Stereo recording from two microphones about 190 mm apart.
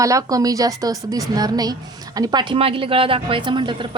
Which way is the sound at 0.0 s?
15° right (ahead or behind).